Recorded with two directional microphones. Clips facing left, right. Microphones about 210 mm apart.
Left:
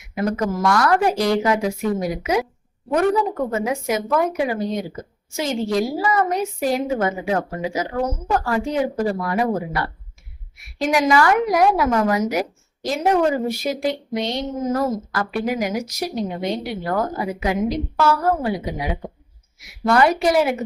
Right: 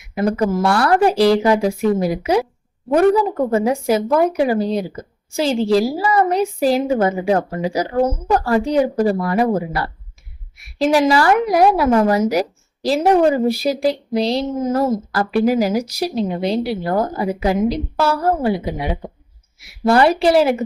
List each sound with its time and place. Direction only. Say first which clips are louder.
0.1 s a woman's voice: right 4 dB; 30° right (ahead or behind)